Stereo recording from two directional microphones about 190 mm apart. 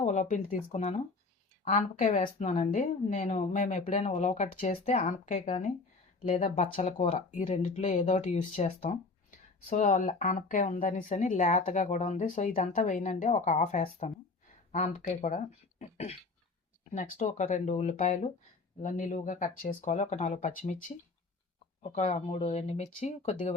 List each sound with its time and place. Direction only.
0.0 s speech: 40° left (ahead or behind)
9.6 s speech: 45° left (ahead or behind)
15.8 s a sound: 35° left (ahead or behind)
16.8 s speech: 35° left (ahead or behind)
21.9 s speech: 35° left (ahead or behind)